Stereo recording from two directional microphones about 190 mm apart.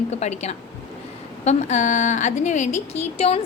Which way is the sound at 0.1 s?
35° left (ahead or behind).